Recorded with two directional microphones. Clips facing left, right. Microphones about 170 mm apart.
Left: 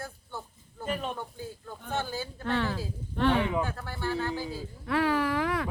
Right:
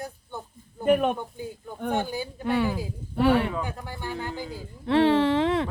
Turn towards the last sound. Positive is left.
turn(degrees=-25)  # may be behind; listen again after turning